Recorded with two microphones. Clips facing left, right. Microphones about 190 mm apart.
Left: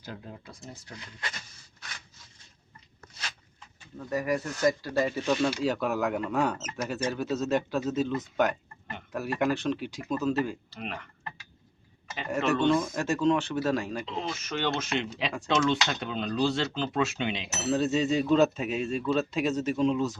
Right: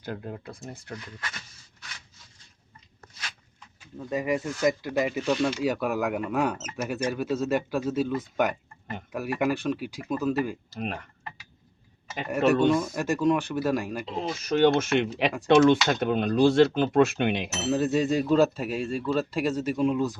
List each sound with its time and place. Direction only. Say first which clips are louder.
0.0 s speech: right 7 dB; 55° right (ahead or behind)
3.9 s speech: right 2 dB; 20° right (ahead or behind)
10.8 s speech: right 5 dB; 45° right (ahead or behind)
12.3 s speech: right 3 dB; 10° right (ahead or behind)
14.0 s speech: right 3 dB; 40° right (ahead or behind); by 17.5 s 55° right (ahead or behind)
17.7 s speech: right 1 dB; 10° right (ahead or behind)